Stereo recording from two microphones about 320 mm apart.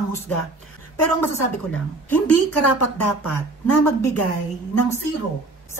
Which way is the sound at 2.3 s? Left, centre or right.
Left.